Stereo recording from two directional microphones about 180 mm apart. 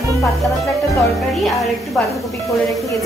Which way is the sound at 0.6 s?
15° left (ahead or behind).